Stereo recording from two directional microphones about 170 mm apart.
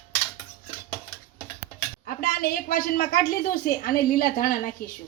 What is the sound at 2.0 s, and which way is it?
Speech, 60° left (ahead or behind).